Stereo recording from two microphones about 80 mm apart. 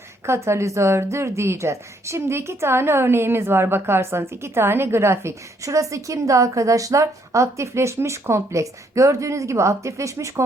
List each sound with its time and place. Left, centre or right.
0.3 s a woman's voice: right